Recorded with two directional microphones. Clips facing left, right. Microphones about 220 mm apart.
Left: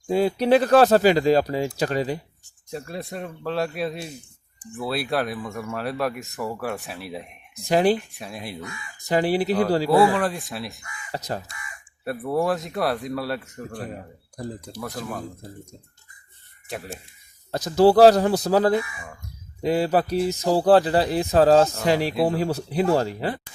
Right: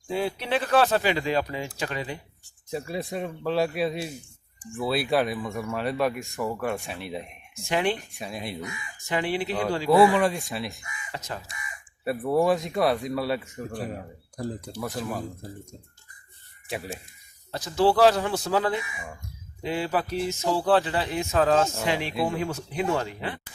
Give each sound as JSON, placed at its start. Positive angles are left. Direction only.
{"t": 0.1, "sound": "speech", "side_deg": 40}
{"t": 2.6, "sound": "speech", "side_deg": -5}
{"t": 7.5, "sound": "speech", "side_deg": 35}
{"t": 8.2, "sound": "speech", "side_deg": 0}
{"t": 9.0, "sound": "speech", "side_deg": 40}
{"t": 10.2, "sound": "speech", "side_deg": 0}
{"t": 11.1, "sound": "speech", "side_deg": 35}
{"t": 12.0, "sound": "speech", "side_deg": 0}
{"t": 16.6, "sound": "speech", "side_deg": 0}
{"t": 17.5, "sound": "speech", "side_deg": 40}
{"t": 18.9, "sound": "speech", "side_deg": -10}
{"t": 19.6, "sound": "speech", "side_deg": 40}